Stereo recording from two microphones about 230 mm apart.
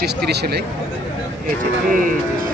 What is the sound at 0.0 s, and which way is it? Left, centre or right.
Speech, right.